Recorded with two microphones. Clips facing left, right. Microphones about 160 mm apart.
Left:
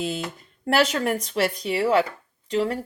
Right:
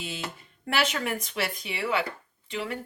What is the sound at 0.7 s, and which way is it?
Speech, 35° left (ahead or behind).